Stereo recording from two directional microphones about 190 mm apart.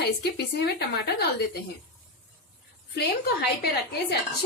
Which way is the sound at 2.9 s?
55° left (ahead or behind).